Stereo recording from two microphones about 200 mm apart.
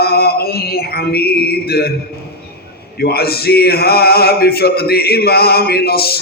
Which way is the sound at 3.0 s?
50° left (ahead or behind).